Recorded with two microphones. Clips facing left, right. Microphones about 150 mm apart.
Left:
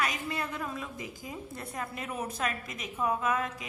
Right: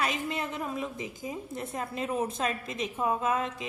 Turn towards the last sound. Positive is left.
turn(degrees=-25)  # may be behind; listen again after turning